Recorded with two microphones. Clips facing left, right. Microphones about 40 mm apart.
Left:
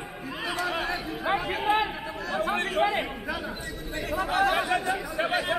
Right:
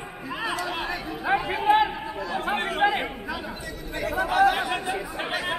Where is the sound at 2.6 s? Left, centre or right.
Centre.